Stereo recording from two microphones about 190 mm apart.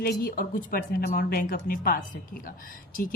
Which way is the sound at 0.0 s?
50° left (ahead or behind).